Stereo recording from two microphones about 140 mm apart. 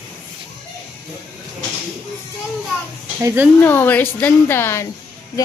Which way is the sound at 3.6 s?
15° left (ahead or behind).